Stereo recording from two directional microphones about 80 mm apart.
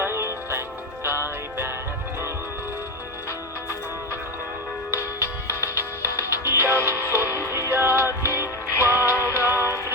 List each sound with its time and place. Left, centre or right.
0.0 s music: right
4.9 s music: right